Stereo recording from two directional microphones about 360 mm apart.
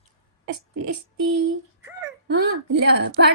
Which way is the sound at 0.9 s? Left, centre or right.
Right.